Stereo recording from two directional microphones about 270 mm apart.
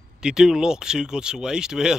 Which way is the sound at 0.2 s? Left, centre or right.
Centre.